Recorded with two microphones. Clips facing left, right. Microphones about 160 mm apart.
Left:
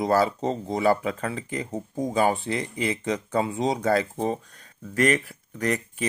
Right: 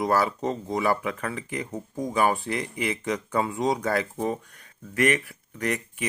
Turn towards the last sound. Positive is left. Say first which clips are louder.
# left 2 dB
turn(degrees=35)  # may be behind; listen again after turning